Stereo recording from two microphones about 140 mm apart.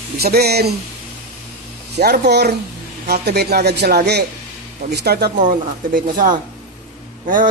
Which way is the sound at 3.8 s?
90° right.